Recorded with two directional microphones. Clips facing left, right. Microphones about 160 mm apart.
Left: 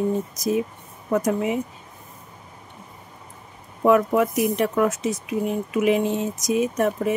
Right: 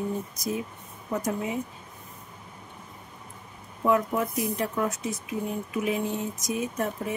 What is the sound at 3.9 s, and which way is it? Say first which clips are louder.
Speech: left 7 dB; 85° left.